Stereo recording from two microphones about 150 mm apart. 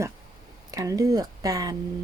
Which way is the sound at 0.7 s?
25° right (ahead or behind).